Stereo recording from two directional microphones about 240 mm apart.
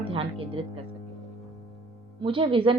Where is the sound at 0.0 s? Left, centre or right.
Right.